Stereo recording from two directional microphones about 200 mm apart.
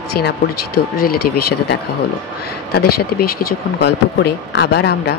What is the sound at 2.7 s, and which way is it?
Speech, 50° left (ahead or behind).